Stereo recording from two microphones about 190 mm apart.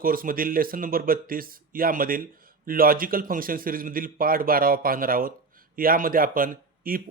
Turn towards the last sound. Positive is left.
turn(degrees=-50)  # may be behind; listen again after turning